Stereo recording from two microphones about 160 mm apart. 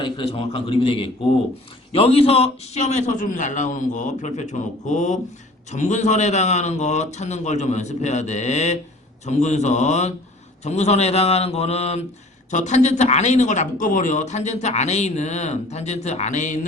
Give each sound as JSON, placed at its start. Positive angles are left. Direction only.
{"t": 0.0, "sound": "a man's voice", "side_deg": 30}